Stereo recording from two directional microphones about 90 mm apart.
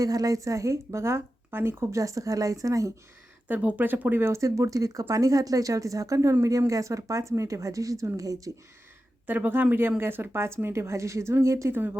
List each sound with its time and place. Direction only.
0.0 s speech: 40° right (ahead or behind)
3.5 s speech: 15° right (ahead or behind); by 8.5 s 40° right (ahead or behind)
9.2 s speech: 20° right (ahead or behind)